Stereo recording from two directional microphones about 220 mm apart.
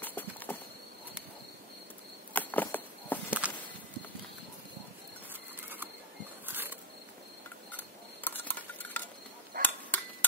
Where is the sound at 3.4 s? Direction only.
5° right (ahead or behind).